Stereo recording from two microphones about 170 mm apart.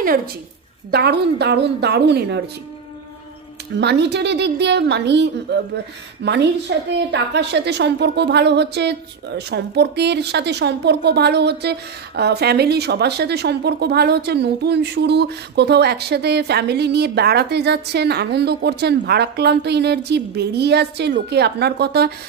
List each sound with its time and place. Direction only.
0.9 s a woman's voice: 75° right (ahead or behind)
3.8 s a woman's voice: 85° right